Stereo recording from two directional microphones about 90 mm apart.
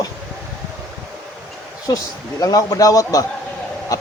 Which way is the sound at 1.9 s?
45° left (ahead or behind).